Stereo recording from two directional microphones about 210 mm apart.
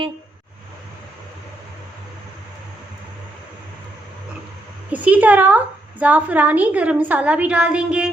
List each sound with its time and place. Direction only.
4.9 s a woman's voice: 5° right (ahead or behind)